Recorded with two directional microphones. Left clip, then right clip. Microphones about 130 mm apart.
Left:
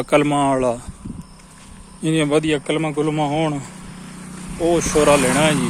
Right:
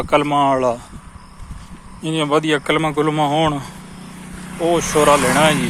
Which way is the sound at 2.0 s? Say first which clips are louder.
Even; 55° left (ahead or behind).